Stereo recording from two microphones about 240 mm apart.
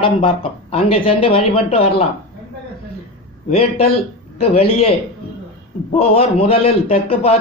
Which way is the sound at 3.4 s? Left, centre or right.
Left.